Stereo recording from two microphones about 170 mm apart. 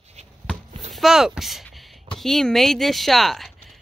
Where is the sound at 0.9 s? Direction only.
Centre (ahead or behind).